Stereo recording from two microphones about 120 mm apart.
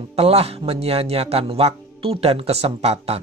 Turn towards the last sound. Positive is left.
turn(degrees=-60)  # may be behind; listen again after turning